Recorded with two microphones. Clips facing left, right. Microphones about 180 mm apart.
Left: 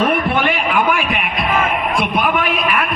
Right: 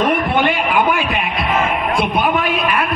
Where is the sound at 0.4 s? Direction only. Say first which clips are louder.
Right 1 dB; 25° right (ahead or behind).